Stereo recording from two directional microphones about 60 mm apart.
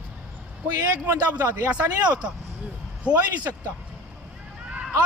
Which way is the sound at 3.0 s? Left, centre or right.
Left.